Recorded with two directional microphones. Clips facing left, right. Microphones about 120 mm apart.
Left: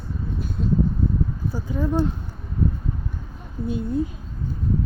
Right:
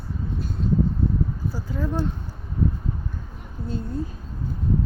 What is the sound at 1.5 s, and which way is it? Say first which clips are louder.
Speech: left 4 dB; 15° left (ahead or behind).